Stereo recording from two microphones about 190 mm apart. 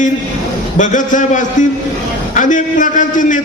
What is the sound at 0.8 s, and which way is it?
A man's voice, 40° left (ahead or behind).